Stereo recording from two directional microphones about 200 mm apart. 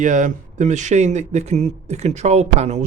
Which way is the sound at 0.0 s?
40° right (ahead or behind).